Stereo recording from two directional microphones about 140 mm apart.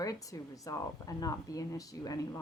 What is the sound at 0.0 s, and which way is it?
Speech, 25° left (ahead or behind).